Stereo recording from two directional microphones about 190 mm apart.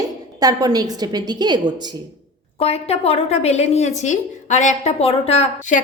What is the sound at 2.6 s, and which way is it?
A woman's voice, 30° left (ahead or behind).